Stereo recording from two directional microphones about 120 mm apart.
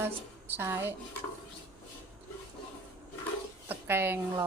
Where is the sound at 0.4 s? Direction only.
15° right (ahead or behind).